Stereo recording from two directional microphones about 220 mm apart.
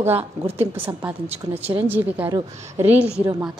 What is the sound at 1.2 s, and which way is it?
Speech, 25° right (ahead or behind).